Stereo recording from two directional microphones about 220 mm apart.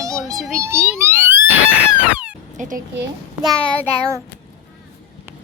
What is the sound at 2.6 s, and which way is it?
Speech, 35° right (ahead or behind).